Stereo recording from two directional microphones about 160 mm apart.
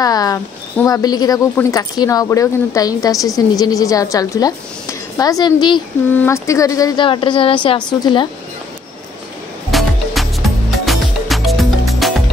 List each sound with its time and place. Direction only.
0.0 s a sound: 25° left (ahead or behind)
0.8 s speech: 25° left (ahead or behind)
6.1 s speech: 15° left (ahead or behind)
9.7 s music: centre (ahead or behind)